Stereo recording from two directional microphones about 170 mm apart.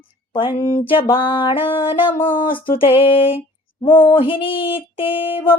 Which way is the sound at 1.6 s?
30° left (ahead or behind).